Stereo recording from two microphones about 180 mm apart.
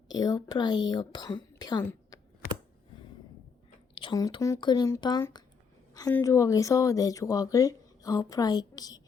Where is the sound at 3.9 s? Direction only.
25° left (ahead or behind).